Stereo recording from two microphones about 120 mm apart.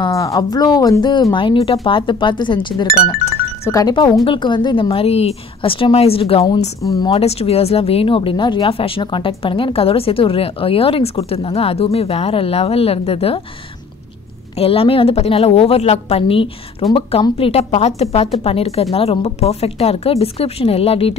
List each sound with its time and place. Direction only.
0.0 s speech: 30° left (ahead or behind)
3.6 s speech: 30° left (ahead or behind); by 6.4 s 55° left (ahead or behind)
6.9 s speech: 30° left (ahead or behind)
7.2 s speech: 55° left (ahead or behind)
14.6 s a woman's voice: 50° left (ahead or behind)